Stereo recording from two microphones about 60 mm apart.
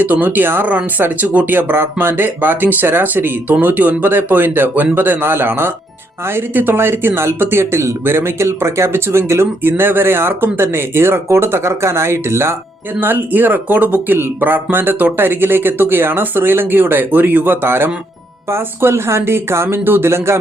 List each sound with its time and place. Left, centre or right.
0.0 s speech: right
1.5 s speech: right
13.0 s speech: right